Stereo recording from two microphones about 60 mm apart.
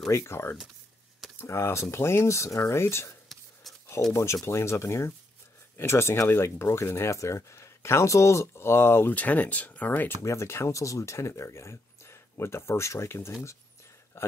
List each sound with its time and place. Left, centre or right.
0.2 s speech: left
1.4 s speech: left
9.1 s speech: left
10.2 s speech: left